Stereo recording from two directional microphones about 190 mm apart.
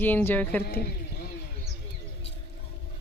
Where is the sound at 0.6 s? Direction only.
55° left (ahead or behind).